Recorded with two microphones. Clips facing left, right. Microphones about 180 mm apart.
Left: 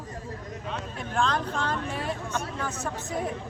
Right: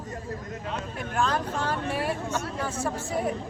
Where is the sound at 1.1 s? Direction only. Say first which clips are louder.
Even; 5° right (ahead or behind).